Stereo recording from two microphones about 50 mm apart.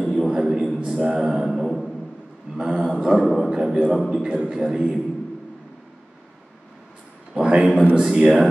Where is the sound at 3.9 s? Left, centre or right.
Centre.